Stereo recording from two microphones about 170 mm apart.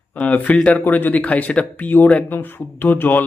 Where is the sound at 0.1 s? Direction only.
10° left (ahead or behind).